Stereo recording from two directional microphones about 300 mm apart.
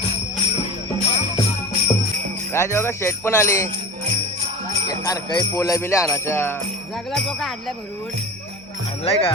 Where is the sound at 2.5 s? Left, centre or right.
Centre.